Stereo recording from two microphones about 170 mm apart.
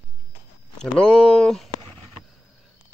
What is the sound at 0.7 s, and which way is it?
Speech, 5° left (ahead or behind).